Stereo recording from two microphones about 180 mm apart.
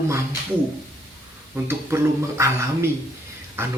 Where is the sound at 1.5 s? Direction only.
15° right (ahead or behind).